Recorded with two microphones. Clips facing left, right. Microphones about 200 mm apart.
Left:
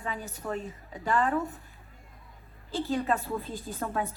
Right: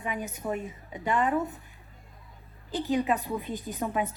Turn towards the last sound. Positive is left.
turn(degrees=-15)  # may be behind; listen again after turning